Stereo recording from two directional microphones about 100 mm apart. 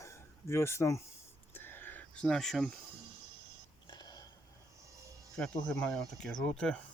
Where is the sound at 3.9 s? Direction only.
45° left (ahead or behind).